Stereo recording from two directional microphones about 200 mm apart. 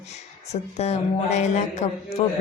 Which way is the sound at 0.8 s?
35° left (ahead or behind).